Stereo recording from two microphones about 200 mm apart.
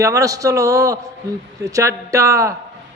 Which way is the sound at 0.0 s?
15° right (ahead or behind).